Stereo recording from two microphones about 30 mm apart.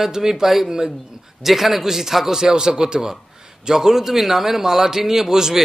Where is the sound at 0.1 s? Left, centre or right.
Centre.